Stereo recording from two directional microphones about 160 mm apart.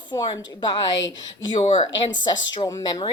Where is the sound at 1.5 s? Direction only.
35° left (ahead or behind).